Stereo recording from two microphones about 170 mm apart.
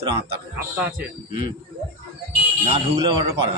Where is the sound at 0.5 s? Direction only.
10° right (ahead or behind).